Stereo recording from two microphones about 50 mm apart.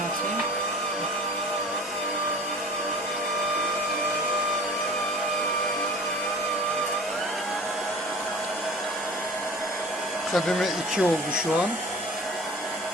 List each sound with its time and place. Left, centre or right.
10.3 s speech: centre
10.9 s speech: centre